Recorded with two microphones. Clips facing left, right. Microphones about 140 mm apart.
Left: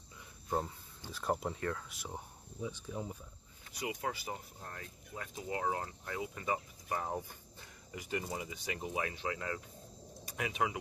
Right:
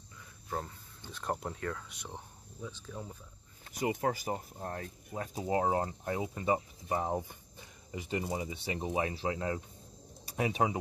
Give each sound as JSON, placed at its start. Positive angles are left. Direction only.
{"t": 0.5, "sound": "speech", "side_deg": 10}
{"t": 3.7, "sound": "speech", "side_deg": -45}